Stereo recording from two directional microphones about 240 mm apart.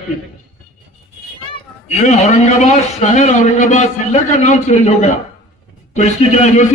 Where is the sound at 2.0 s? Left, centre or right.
Left.